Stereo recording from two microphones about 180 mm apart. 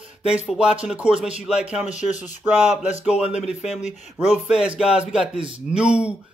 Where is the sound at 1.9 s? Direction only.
40° left (ahead or behind).